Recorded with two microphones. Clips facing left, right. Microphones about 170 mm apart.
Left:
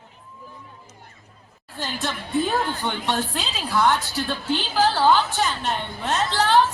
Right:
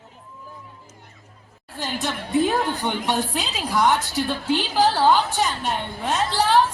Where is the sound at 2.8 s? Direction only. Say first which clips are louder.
Right 2 dB; 15° right (ahead or behind).